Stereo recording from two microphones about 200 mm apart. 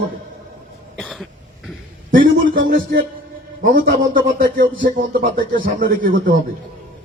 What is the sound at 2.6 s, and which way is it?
A man's voice, 45° right (ahead or behind).